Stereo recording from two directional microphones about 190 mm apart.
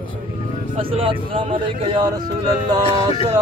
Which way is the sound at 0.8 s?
30° right (ahead or behind).